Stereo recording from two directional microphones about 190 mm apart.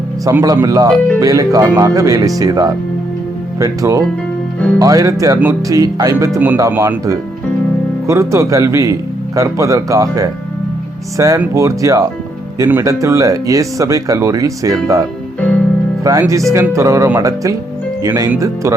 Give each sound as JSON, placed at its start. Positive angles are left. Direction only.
{"t": 0.3, "sound": "speech", "side_deg": -15}
{"t": 16.1, "sound": "speech", "side_deg": -15}